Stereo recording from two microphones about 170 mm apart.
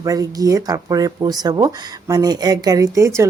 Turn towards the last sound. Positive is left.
turn(degrees=-15)  # may be behind; listen again after turning